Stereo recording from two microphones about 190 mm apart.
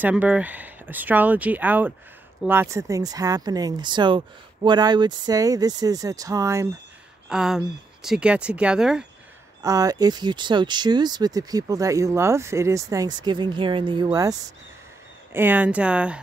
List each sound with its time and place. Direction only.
0.0 s speech: 5° right (ahead or behind)
7.2 s speech: 5° right (ahead or behind)
9.6 s speech: 20° right (ahead or behind)